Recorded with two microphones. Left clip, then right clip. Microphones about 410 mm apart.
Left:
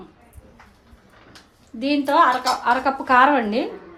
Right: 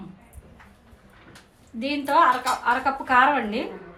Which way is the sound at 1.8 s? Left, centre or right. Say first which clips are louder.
Left 3 dB; left.